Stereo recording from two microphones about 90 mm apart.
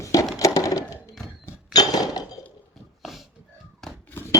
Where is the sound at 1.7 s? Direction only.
45° left (ahead or behind).